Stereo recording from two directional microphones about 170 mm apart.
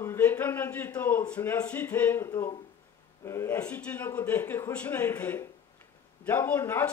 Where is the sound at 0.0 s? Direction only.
15° left (ahead or behind).